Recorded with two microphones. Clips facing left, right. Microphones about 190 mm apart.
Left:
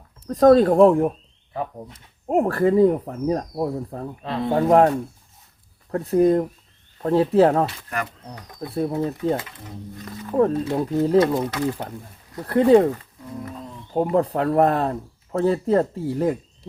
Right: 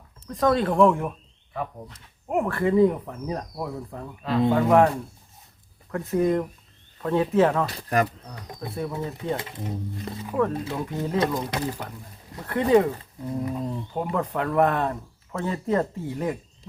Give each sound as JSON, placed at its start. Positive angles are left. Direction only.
{"t": 0.5, "sound": "speech", "side_deg": 40}
{"t": 2.2, "sound": "speech", "side_deg": 35}
{"t": 7.7, "sound": "speech", "side_deg": -35}
{"t": 8.7, "sound": "speech", "side_deg": 35}
{"t": 9.4, "sound": "speech", "side_deg": -25}
{"t": 10.3, "sound": "speech", "side_deg": 35}
{"t": 12.5, "sound": "speech", "side_deg": 35}
{"t": 13.9, "sound": "speech", "side_deg": 35}